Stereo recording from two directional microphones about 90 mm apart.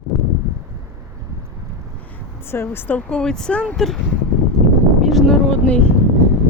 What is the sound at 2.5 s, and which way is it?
Speech, 25° left (ahead or behind).